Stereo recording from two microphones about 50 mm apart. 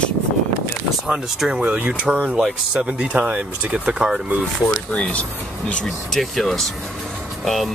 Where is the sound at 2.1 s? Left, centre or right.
Right.